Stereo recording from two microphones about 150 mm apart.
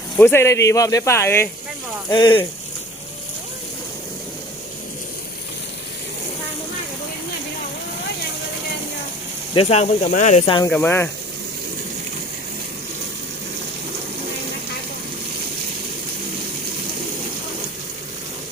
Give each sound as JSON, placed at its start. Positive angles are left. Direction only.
{"t": 0.2, "sound": "speech", "side_deg": 15}
{"t": 2.0, "sound": "speech", "side_deg": 30}
{"t": 9.6, "sound": "speech", "side_deg": 45}
{"t": 10.7, "sound": "speech", "side_deg": 15}